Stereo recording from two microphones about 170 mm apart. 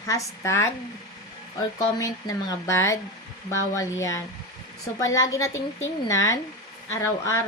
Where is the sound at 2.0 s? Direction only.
20° left (ahead or behind).